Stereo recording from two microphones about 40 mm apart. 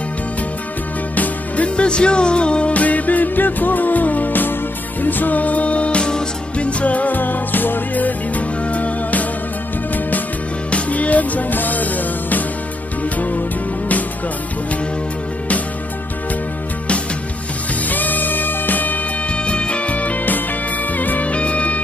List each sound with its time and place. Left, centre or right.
1.1 s music: left
1.8 s music: left
6.8 s music: left
10.7 s music: left
17.8 s music: left
19.3 s music: left
21.3 s music: left